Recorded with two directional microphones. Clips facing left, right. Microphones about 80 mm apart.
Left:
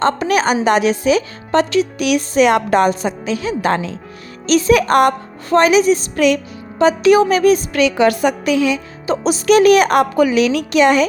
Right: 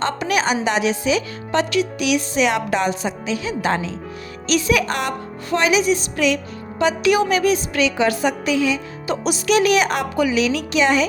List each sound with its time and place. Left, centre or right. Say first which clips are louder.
0.0 s speech: left 5 dB; left
4.4 s a woman's voice: left 6 dB; left
6.7 s a woman's voice: left 6 dB; left
9.0 s speech: left 6 dB; left